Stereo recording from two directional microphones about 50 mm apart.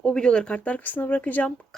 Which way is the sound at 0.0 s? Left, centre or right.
Centre.